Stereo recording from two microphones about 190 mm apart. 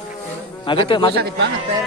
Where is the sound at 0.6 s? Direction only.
25° left (ahead or behind).